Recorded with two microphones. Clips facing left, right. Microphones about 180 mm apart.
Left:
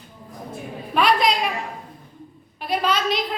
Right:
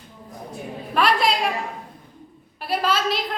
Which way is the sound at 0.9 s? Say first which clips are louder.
Left 1 dB; centre (ahead or behind).